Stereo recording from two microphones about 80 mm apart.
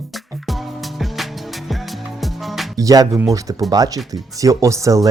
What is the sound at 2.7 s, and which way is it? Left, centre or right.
Speech, right.